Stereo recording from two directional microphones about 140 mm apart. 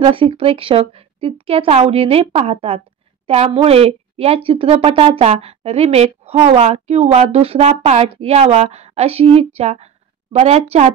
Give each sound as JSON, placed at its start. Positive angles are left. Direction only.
{"t": 0.0, "sound": "a woman's voice", "side_deg": -40}